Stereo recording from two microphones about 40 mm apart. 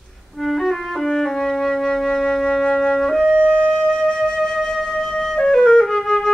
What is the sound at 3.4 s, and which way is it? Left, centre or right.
Flute, left.